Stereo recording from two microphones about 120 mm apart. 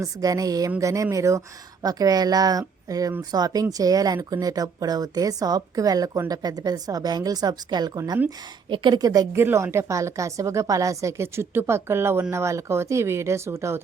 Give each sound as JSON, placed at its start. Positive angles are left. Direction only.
{"t": 0.0, "sound": "a woman's voice", "side_deg": -30}
{"t": 9.4, "sound": "a woman's voice", "side_deg": -20}